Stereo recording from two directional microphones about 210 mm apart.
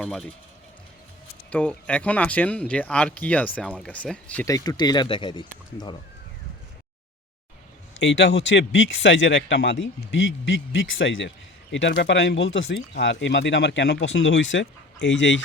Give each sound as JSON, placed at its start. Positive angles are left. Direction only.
{"t": 0.0, "sound": "speech", "side_deg": 0}
{"t": 1.5, "sound": "speech", "side_deg": 5}
{"t": 7.9, "sound": "speech", "side_deg": 60}